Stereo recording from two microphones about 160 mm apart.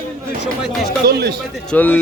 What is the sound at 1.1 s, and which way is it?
Speech, 90° right.